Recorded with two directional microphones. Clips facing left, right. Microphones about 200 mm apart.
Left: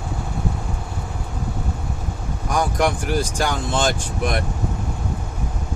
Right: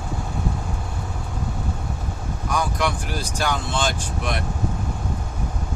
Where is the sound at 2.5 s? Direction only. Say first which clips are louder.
Left 4 dB; 45° left (ahead or behind).